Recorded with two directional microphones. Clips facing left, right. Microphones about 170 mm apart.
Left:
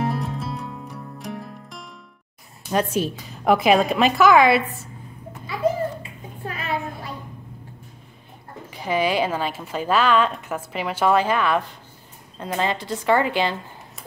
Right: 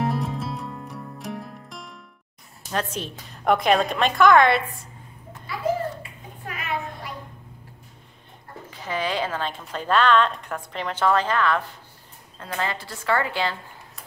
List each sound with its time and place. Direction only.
0.0 s music: centre (ahead or behind)
2.7 s a woman's voice: 10° left (ahead or behind)
6.4 s a sound: 30° left (ahead or behind)
8.6 s a woman's voice: 15° left (ahead or behind)